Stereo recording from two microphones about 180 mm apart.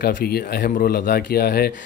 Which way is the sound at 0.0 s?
60° left (ahead or behind).